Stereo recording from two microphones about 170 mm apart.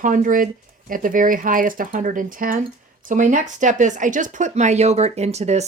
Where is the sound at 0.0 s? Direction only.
50° right (ahead or behind).